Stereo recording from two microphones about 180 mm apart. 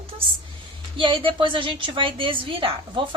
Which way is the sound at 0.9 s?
30° right (ahead or behind).